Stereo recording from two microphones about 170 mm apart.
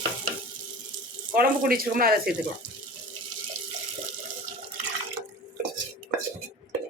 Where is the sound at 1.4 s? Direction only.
60° right (ahead or behind).